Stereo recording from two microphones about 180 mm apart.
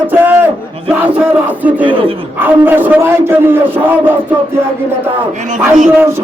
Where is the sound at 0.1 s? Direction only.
10° right (ahead or behind).